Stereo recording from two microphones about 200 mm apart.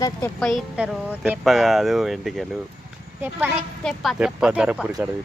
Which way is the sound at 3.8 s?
Centre (ahead or behind).